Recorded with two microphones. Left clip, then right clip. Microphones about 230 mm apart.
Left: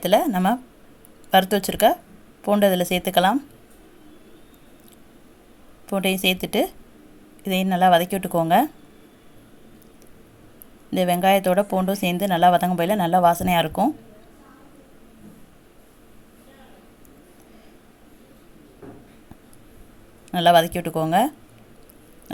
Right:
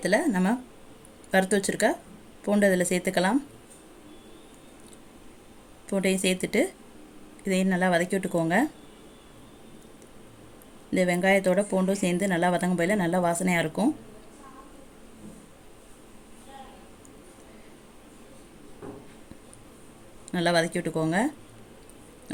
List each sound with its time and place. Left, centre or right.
0.2 s speech: left
5.9 s speech: left
10.9 s speech: left
20.3 s speech: left